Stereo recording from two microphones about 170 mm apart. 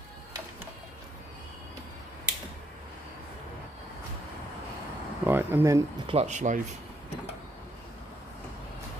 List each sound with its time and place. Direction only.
5.2 s speech: 10° right (ahead or behind)
6.0 s speech: 40° right (ahead or behind)